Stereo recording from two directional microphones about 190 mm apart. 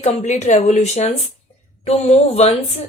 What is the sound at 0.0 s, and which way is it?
Speech, 35° left (ahead or behind).